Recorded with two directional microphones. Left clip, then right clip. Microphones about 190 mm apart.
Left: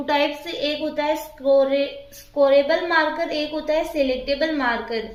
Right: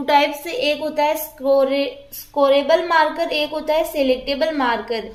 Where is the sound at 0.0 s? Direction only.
40° right (ahead or behind).